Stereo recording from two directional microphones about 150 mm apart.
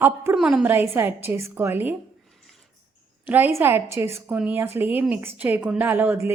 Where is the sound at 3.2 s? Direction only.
15° right (ahead or behind).